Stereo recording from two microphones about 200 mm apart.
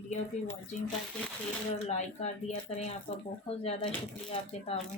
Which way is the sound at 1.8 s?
35° left (ahead or behind).